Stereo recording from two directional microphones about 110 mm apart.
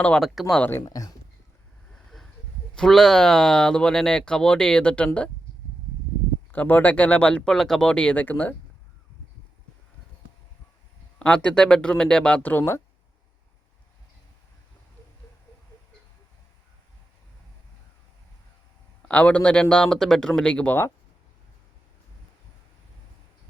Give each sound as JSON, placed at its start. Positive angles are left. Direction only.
{"t": 0.0, "sound": "speech", "side_deg": 5}
{"t": 0.9, "sound": "speech", "side_deg": 30}
{"t": 1.9, "sound": "a sound", "side_deg": 5}
{"t": 2.7, "sound": "speech", "side_deg": 5}
{"t": 6.5, "sound": "speech", "side_deg": 15}
{"t": 11.2, "sound": "speech", "side_deg": 10}
{"t": 19.0, "sound": "speech", "side_deg": 10}